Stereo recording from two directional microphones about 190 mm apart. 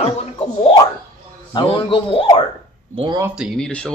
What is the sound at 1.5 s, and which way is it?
Speech, 30° left (ahead or behind).